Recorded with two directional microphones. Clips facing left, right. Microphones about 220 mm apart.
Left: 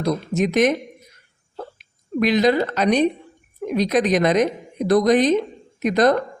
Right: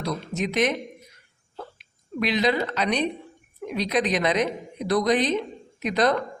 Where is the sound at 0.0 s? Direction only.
45° left (ahead or behind).